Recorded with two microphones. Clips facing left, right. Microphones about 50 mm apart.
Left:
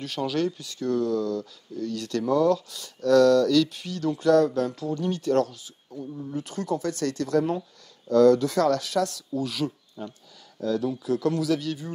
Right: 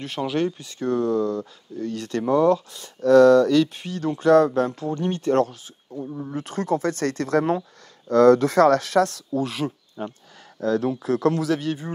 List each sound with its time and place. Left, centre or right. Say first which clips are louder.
0.0 s speech: right 2 dB; right